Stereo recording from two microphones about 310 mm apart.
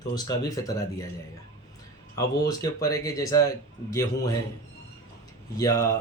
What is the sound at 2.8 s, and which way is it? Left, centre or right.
Speech, centre.